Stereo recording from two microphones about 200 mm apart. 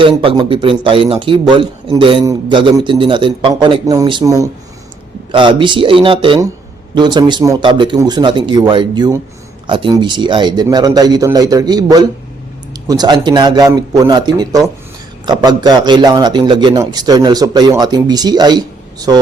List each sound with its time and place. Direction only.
0.0 s a man's voice: 25° right (ahead or behind)